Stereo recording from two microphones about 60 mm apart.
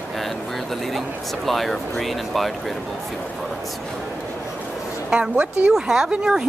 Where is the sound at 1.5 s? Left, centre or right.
Centre.